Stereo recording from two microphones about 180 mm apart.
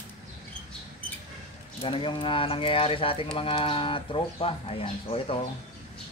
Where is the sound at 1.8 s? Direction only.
30° left (ahead or behind).